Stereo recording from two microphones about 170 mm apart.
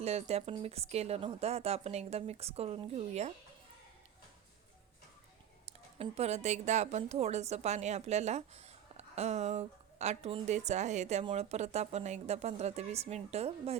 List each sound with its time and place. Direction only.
0.0 s a woman's voice: 40° right (ahead or behind)
5.6 s a woman's voice: 40° right (ahead or behind)